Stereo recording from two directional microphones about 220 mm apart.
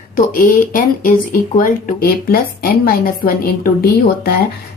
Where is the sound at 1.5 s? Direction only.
40° left (ahead or behind).